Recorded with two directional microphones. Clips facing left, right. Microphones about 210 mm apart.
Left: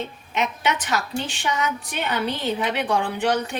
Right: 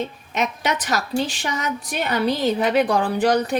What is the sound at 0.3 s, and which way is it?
A woman's voice, 40° right (ahead or behind).